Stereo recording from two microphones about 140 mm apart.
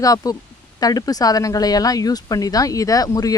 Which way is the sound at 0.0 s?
25° left (ahead or behind).